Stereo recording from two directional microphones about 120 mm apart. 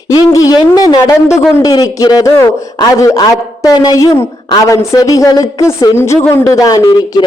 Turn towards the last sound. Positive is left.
turn(degrees=35)  # may be behind; listen again after turning